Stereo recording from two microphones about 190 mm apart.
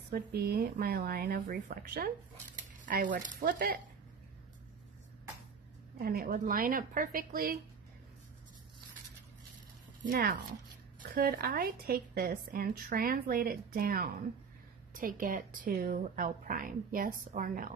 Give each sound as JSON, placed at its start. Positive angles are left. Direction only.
{"t": 0.1, "sound": "speech", "side_deg": -55}
{"t": 5.9, "sound": "speech", "side_deg": -50}
{"t": 10.0, "sound": "speech", "side_deg": -60}